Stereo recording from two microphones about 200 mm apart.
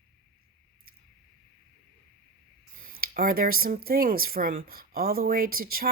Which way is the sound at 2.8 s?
45° right (ahead or behind).